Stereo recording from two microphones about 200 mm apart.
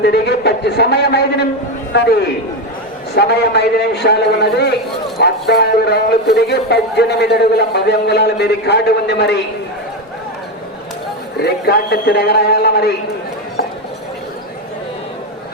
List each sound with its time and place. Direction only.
0.0 s a man's voice: 55° left (ahead or behind)
3.2 s a man's voice: 55° left (ahead or behind)
11.4 s a man's voice: 55° left (ahead or behind)